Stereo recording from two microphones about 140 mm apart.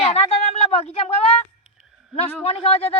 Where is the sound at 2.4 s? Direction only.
45° left (ahead or behind).